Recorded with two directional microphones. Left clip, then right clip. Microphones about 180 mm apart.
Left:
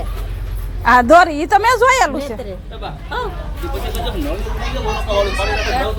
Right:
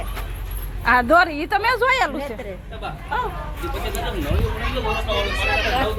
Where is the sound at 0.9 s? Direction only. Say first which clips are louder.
Left 6 dB; 25° left (ahead or behind).